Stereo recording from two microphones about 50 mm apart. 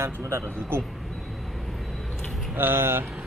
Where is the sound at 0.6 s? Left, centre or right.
Right.